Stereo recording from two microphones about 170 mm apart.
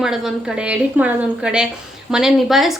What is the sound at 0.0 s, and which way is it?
A woman's voice, centre (ahead or behind).